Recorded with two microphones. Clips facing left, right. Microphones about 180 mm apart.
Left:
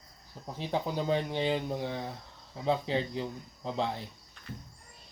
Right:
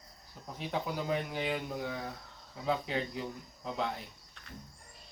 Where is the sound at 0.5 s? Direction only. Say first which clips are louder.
Left 3 dB; 30° left (ahead or behind).